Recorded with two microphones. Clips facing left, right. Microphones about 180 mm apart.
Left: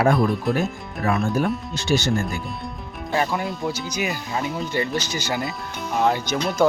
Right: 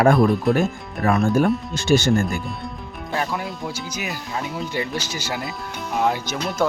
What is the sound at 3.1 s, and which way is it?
Speech, centre (ahead or behind).